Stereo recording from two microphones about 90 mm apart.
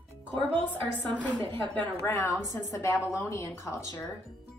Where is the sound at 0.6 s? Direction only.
20° left (ahead or behind).